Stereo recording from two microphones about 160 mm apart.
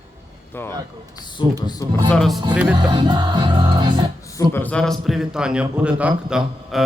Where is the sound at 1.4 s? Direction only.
30° left (ahead or behind).